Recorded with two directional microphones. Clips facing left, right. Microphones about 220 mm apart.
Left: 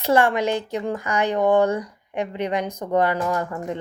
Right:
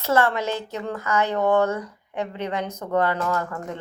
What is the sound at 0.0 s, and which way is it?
Speech, 15° left (ahead or behind).